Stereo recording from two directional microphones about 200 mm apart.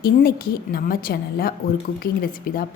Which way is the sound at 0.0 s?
50° left (ahead or behind).